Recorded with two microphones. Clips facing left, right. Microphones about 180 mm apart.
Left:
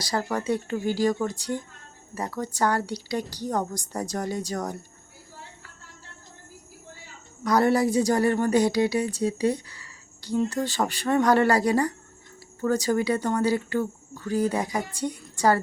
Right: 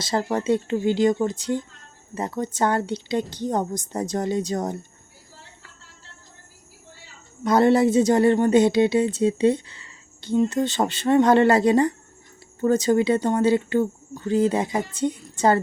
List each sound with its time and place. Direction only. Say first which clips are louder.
0.0 s a woman's voice: right 4 dB; 25° right (ahead or behind)
7.4 s a woman's voice: right 4 dB; 25° right (ahead or behind)